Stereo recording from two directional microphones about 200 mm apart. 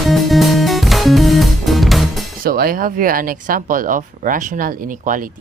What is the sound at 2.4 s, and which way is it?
A woman's voice, 45° right (ahead or behind).